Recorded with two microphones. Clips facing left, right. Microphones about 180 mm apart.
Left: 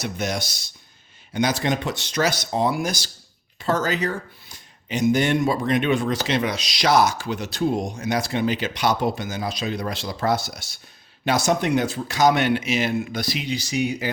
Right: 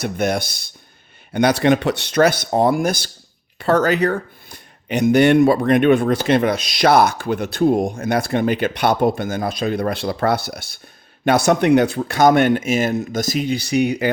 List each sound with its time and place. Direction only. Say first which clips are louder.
0.0 s speech: right 6 dB; 55° right (ahead or behind)